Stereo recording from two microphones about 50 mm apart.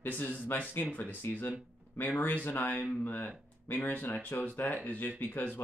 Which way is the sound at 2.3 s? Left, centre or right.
Left.